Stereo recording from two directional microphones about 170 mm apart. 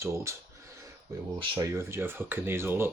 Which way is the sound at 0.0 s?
15° right (ahead or behind).